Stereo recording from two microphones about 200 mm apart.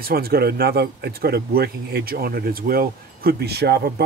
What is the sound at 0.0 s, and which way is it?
Speech, 50° right (ahead or behind).